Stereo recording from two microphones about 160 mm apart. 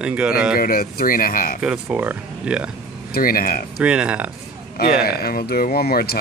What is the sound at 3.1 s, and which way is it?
Speech, 65° left (ahead or behind).